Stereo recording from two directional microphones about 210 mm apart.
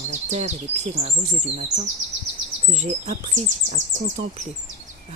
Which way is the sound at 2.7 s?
35° right (ahead or behind).